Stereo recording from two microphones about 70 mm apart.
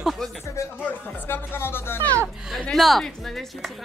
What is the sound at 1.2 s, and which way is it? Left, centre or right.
Speech, left.